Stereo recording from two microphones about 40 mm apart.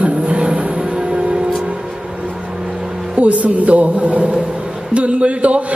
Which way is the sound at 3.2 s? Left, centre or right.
Right.